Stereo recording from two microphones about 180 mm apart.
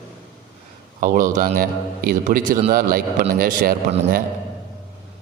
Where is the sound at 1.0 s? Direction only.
50° right (ahead or behind).